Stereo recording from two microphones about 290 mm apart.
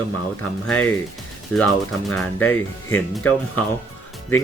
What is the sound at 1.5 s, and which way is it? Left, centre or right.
Speech, centre.